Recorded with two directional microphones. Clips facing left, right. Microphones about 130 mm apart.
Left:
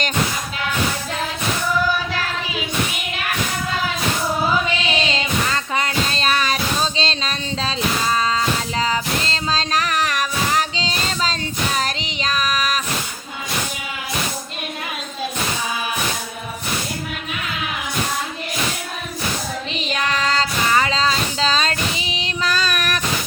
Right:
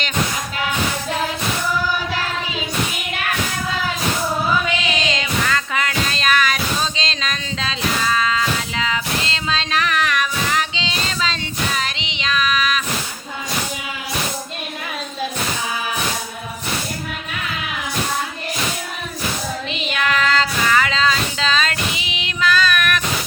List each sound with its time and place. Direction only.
4.8 s music: 30° left (ahead or behind)
11.8 s child singing: 40° left (ahead or behind)
19.7 s child singing: 35° left (ahead or behind)